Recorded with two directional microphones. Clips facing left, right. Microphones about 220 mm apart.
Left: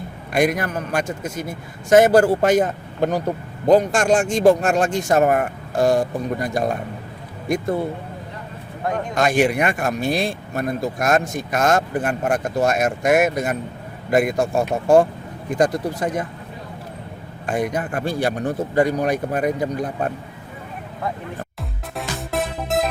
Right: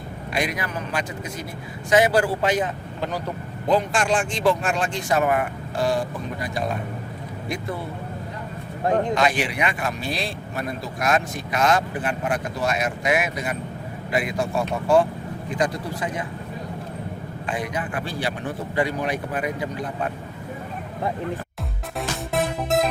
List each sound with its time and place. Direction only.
0.3 s a man's voice: 50° left (ahead or behind)
9.1 s a man's voice: 45° left (ahead or behind)
17.4 s a man's voice: 45° left (ahead or behind)
21.9 s music: centre (ahead or behind)